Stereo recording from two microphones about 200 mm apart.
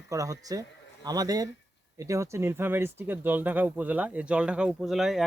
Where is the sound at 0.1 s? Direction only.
15° right (ahead or behind).